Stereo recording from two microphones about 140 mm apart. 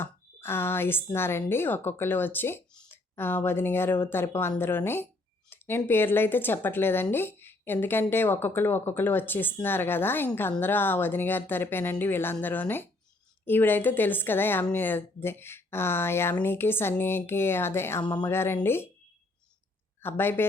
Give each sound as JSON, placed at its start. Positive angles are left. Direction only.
{"t": 0.0, "sound": "speech", "side_deg": 15}
{"t": 20.0, "sound": "a man's voice", "side_deg": 15}